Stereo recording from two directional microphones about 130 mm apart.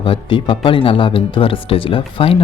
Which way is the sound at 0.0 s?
40° left (ahead or behind).